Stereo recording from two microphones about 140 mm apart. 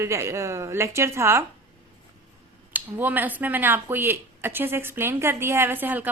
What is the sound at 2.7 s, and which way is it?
Speech, 15° right (ahead or behind).